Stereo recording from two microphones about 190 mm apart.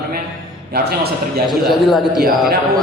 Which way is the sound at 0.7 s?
55° right (ahead or behind).